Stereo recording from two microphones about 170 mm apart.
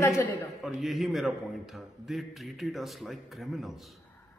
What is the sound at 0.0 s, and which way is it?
Speech, 15° left (ahead or behind).